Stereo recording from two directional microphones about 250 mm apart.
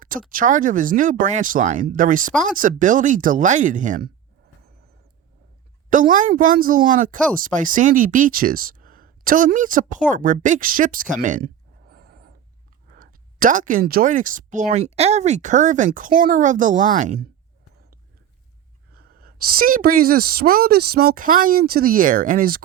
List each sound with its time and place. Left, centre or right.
0.0 s speech: right
5.9 s speech: right
18.9 s speech: right